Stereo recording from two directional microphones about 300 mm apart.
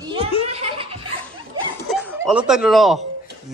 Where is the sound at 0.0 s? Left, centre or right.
Centre.